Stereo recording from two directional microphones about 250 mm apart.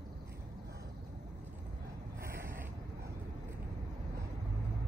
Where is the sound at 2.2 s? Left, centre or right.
Right.